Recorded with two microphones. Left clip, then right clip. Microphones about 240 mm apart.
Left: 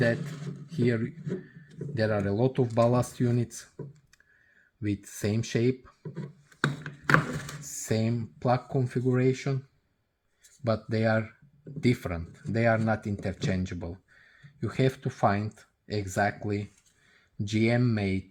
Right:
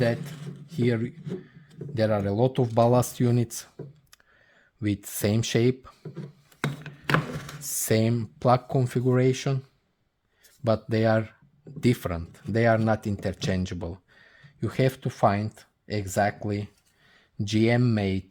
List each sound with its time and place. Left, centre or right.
0.7 s speech: right
4.8 s speech: right
6.8 s a sound: centre
7.6 s speech: right